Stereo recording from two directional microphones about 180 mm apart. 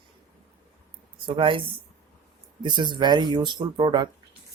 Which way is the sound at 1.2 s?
30° right (ahead or behind).